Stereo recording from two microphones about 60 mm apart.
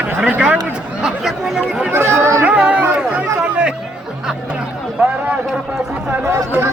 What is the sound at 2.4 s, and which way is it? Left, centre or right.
Chatter, centre.